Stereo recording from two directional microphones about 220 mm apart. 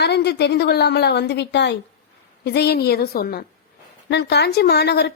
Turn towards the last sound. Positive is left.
turn(degrees=50)  # may be behind; listen again after turning